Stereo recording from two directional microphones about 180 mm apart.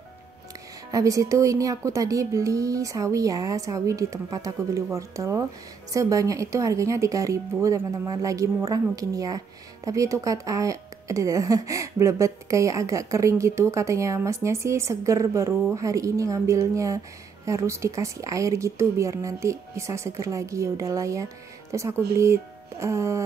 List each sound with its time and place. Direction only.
0.9 s speech: 20° right (ahead or behind)